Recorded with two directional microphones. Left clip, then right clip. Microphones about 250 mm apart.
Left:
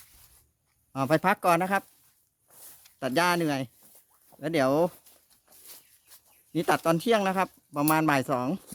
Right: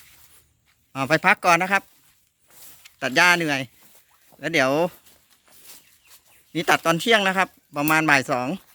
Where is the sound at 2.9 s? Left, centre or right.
Centre.